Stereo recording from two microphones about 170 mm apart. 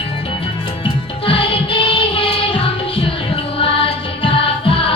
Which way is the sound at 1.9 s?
30° left (ahead or behind).